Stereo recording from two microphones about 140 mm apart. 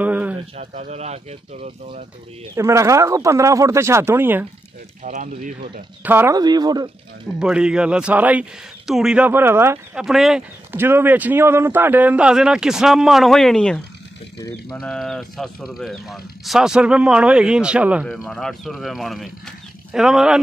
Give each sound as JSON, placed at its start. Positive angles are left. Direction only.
{"t": 0.0, "sound": "a sound", "side_deg": -10}
{"t": 0.6, "sound": "speech", "side_deg": -55}
{"t": 2.5, "sound": "speech", "side_deg": -20}
{"t": 5.1, "sound": "speech", "side_deg": -65}
{"t": 6.0, "sound": "a man's voice", "side_deg": -15}
{"t": 6.3, "sound": "speech", "side_deg": -30}
{"t": 7.3, "sound": "a man's voice", "side_deg": -5}
{"t": 9.9, "sound": "speech", "side_deg": -5}
{"t": 10.7, "sound": "a man's voice", "side_deg": -15}
{"t": 18.1, "sound": "speech", "side_deg": 5}